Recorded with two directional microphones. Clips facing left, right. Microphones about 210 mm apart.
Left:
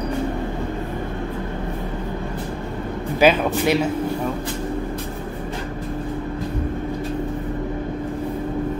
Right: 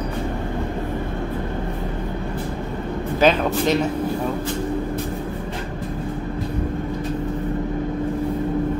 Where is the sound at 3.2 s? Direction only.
10° left (ahead or behind).